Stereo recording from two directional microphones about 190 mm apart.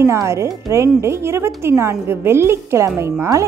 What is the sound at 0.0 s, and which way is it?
Speech, 15° right (ahead or behind).